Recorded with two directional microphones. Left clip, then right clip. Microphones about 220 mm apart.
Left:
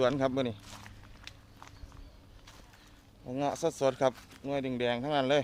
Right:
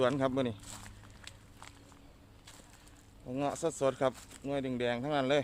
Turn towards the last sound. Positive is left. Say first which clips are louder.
# left 2 dB
turn(degrees=15)  # may be behind; listen again after turning